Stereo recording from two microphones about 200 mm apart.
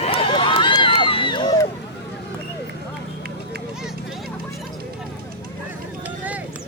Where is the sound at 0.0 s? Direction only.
30° left (ahead or behind).